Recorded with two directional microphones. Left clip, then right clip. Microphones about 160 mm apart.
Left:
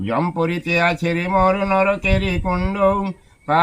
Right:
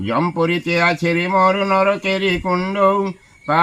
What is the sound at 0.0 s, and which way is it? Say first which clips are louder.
Speech: right 2 dB; 25° left (ahead or behind).